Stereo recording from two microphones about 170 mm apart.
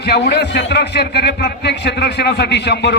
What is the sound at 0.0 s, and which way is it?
A man's voice, 75° left (ahead or behind).